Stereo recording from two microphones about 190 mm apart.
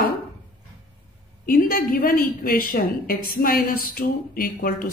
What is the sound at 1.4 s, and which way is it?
Speech, 50° left (ahead or behind).